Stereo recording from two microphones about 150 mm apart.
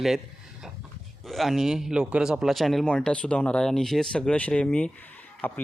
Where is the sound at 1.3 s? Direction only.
Centre (ahead or behind).